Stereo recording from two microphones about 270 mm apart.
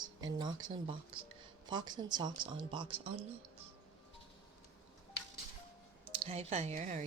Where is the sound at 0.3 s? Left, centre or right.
Centre.